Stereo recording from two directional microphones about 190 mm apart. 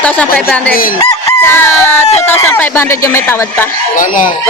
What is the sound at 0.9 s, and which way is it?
Chicken, 15° left (ahead or behind).